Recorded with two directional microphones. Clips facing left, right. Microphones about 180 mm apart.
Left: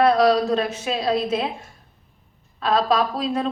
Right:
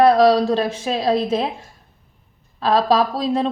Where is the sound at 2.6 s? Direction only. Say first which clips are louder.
Right 3 dB; 35° right (ahead or behind).